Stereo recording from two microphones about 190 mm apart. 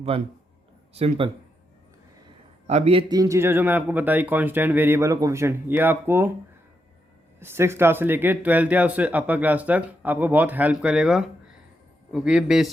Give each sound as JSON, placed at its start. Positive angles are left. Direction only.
{"t": 0.1, "sound": "speech", "side_deg": -30}
{"t": 2.6, "sound": "speech", "side_deg": -35}
{"t": 3.1, "sound": "speech", "side_deg": -20}
{"t": 7.3, "sound": "a man's voice", "side_deg": -10}